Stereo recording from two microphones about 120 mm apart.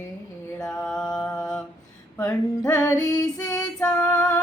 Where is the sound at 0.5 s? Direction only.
5° left (ahead or behind).